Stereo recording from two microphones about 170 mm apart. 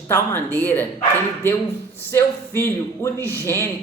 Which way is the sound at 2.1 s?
15° left (ahead or behind).